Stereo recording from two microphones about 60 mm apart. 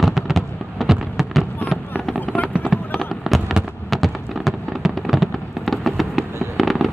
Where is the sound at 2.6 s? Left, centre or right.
Centre.